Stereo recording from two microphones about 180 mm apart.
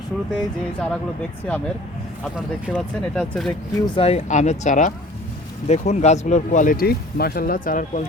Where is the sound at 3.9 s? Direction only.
30° left (ahead or behind).